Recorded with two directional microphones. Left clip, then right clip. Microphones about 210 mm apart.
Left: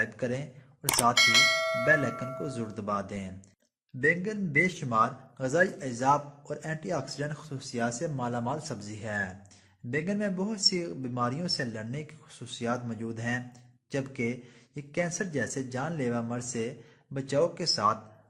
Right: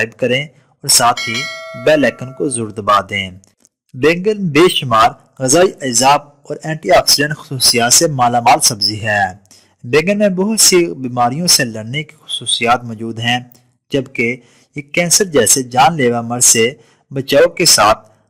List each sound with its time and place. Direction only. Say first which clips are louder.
0.0 s speech: right 16 dB; 45° right (ahead or behind)
1.1 s speech: right 2 dB; centre (ahead or behind)
1.8 s speech: right 19 dB; 45° right (ahead or behind)
5.4 s speech: right 15 dB; 45° right (ahead or behind)